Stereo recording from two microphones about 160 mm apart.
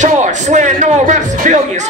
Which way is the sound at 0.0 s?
50° right (ahead or behind).